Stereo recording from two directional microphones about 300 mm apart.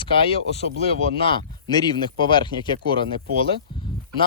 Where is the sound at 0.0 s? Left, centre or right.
Centre.